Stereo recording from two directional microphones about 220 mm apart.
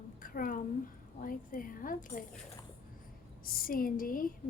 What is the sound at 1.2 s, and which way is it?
A woman's voice, 40° left (ahead or behind).